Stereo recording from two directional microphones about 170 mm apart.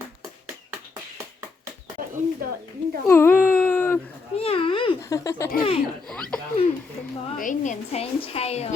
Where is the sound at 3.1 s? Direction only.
15° left (ahead or behind).